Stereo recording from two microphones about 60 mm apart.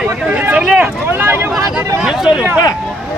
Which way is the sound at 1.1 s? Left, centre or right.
Right.